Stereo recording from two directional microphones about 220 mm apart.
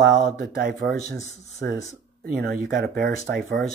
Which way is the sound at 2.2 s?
45° right (ahead or behind).